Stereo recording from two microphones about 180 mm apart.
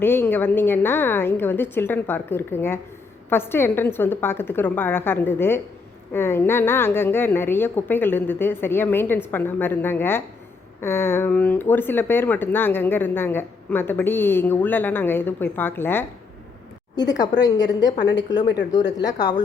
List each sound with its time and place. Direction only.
0.0 s speech: 10° left (ahead or behind)
18.0 s speech: 75° left (ahead or behind)